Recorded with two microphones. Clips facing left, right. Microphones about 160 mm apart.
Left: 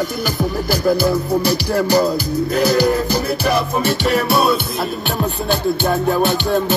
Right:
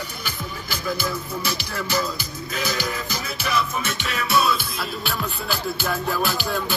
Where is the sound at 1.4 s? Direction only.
35° left (ahead or behind).